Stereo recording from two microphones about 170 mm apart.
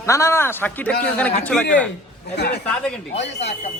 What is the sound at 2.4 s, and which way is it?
Speech, 75° left (ahead or behind).